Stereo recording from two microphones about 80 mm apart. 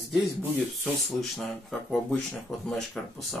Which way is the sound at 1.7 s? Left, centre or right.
Centre.